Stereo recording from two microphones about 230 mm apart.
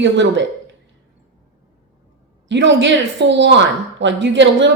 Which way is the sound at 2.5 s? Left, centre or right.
Right.